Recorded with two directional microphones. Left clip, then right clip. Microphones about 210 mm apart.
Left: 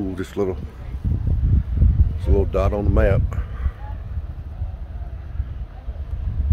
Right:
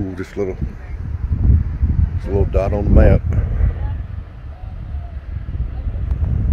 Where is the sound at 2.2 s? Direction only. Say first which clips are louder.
Right 2 dB; centre (ahead or behind).